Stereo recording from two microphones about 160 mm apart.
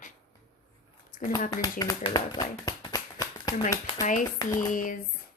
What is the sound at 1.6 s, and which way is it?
Speech, 25° left (ahead or behind).